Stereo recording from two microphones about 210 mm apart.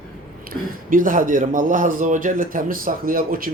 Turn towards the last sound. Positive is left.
turn(degrees=-45)  # may be behind; listen again after turning